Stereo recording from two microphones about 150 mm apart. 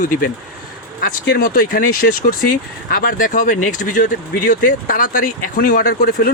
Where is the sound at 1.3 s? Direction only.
85° left.